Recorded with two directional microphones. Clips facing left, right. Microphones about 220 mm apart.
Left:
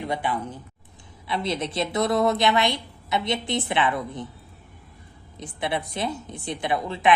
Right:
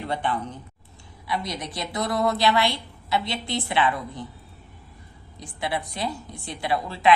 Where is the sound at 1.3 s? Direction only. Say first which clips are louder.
Left 3 dB; 25° left (ahead or behind).